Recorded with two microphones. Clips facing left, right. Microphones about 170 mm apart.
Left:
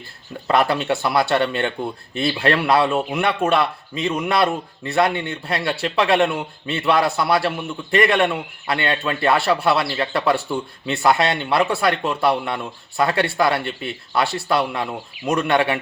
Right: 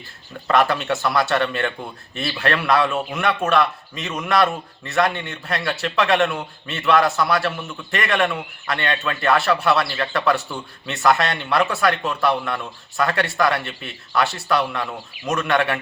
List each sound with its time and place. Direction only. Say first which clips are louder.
0.4 s a man's voice: left 1 dB; 30° left (ahead or behind)